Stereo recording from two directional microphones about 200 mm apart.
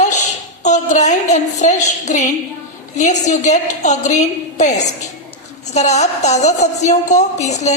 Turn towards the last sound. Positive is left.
turn(degrees=35)  # may be behind; listen again after turning